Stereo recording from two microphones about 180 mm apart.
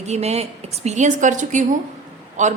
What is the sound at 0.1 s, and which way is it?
A woman's voice, 35° right (ahead or behind).